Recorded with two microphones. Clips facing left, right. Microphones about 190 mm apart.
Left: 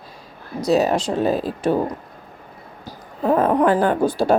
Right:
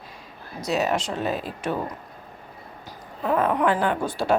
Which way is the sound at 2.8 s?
35° left (ahead or behind).